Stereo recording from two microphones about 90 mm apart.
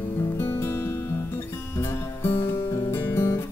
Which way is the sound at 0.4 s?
25° left (ahead or behind).